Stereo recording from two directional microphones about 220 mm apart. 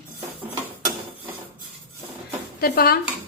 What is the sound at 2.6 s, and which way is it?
Speech, 45° left (ahead or behind).